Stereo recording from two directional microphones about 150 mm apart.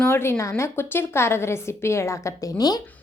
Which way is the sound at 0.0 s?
15° left (ahead or behind).